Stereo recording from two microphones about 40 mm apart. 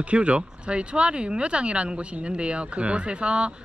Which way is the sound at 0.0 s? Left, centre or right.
Right.